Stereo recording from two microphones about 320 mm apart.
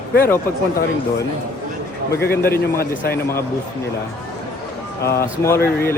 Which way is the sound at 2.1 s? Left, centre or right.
Left.